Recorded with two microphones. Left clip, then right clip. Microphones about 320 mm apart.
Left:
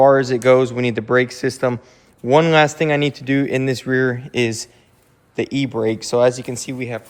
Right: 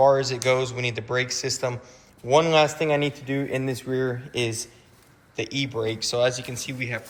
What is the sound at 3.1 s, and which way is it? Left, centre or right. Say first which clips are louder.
Speech: left 9 dB; left.